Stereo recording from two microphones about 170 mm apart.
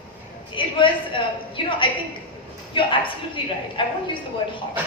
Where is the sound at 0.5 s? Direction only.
30° left (ahead or behind).